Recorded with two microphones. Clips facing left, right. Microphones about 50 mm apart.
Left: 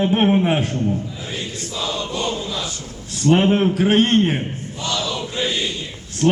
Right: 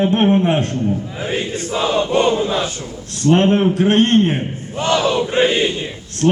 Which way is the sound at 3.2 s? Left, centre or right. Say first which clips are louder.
Right 2 dB; centre.